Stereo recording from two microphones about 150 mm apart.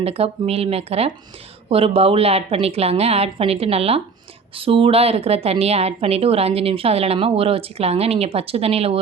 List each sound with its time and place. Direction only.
0.0 s a woman's voice: 40° right (ahead or behind)